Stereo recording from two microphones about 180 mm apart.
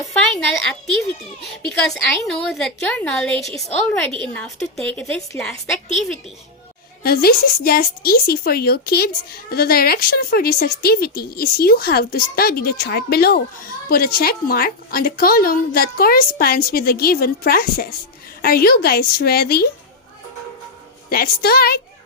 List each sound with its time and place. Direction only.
0.1 s a woman's voice: 5° left (ahead or behind)
2.2 s a woman's voice: centre (ahead or behind)
7.0 s a woman's voice: 55° left (ahead or behind)
21.1 s a woman's voice: 60° left (ahead or behind)